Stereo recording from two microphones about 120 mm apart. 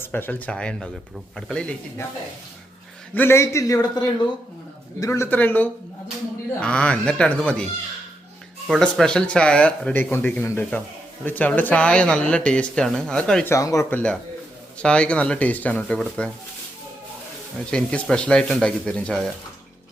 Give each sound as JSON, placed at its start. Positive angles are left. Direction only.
{"t": 0.0, "sound": "speech", "side_deg": 15}
{"t": 3.2, "sound": "a man's voice", "side_deg": 20}
{"t": 8.6, "sound": "speech", "side_deg": 0}
{"t": 13.4, "sound": "a man's voice", "side_deg": 25}
{"t": 13.9, "sound": "speech", "side_deg": 10}
{"t": 17.7, "sound": "speech", "side_deg": 5}